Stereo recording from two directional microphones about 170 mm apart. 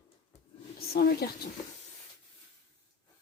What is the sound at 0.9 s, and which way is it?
Speech, 65° left (ahead or behind).